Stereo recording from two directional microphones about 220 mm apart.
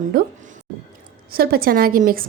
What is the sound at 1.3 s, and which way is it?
Speech, 45° right (ahead or behind).